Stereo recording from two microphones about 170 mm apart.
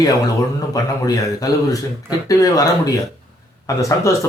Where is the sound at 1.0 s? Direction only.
20° left (ahead or behind).